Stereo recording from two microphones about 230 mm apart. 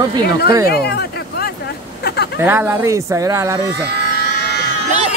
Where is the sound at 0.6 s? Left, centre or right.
Left.